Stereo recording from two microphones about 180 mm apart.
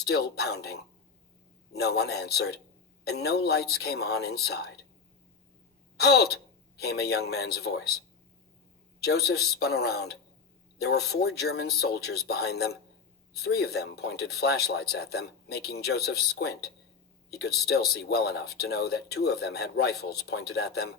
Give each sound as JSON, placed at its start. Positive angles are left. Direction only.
{"t": 0.0, "sound": "speech", "side_deg": 60}
{"t": 6.0, "sound": "speech", "side_deg": 60}
{"t": 9.0, "sound": "speech", "side_deg": 60}